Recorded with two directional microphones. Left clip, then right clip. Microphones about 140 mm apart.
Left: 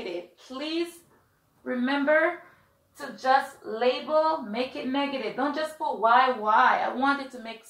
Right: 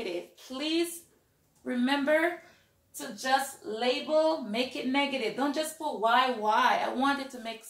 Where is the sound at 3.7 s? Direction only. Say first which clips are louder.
Left 3 dB; 25° right (ahead or behind).